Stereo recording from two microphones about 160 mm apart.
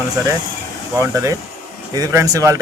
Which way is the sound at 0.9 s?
20° right (ahead or behind).